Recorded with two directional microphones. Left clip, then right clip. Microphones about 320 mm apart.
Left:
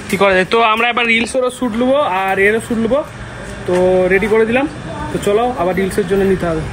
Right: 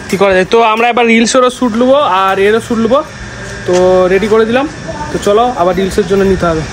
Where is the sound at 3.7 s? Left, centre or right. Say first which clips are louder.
Right 4 dB; centre.